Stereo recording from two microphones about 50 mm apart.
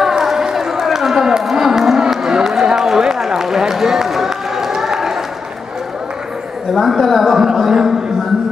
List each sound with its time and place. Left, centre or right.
0.0 s run: centre
6.7 s a woman's voice: centre